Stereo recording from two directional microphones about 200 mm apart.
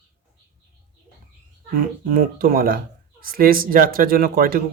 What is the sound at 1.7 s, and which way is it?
Speech, 45° right (ahead or behind).